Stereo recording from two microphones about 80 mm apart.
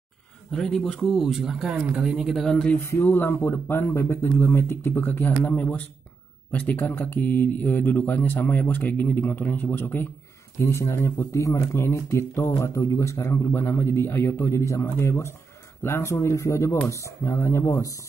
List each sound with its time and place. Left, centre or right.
0.5 s speech: centre
2.8 s speech: left